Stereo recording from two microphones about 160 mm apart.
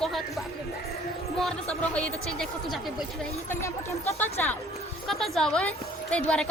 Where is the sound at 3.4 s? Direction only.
15° left (ahead or behind).